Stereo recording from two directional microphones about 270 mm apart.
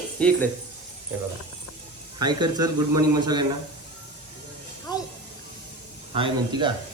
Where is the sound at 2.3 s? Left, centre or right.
Centre.